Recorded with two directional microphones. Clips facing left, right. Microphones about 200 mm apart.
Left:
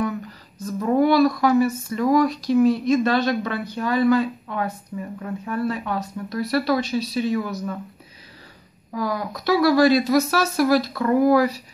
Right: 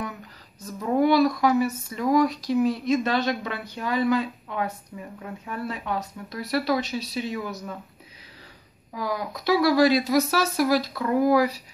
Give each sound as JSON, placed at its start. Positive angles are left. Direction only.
{"t": 1.0, "sound": "speech", "side_deg": -20}
{"t": 8.9, "sound": "speech", "side_deg": -15}